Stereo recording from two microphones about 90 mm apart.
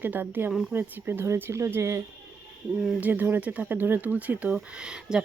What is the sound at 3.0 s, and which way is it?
Speech, 20° right (ahead or behind).